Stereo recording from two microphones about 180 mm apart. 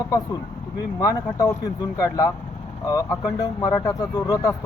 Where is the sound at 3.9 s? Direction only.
20° left (ahead or behind).